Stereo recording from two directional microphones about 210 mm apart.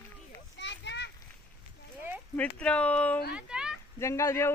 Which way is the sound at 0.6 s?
55° left (ahead or behind).